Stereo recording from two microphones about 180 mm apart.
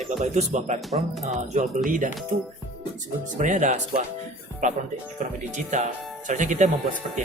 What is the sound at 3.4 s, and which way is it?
Speech, 45° right (ahead or behind).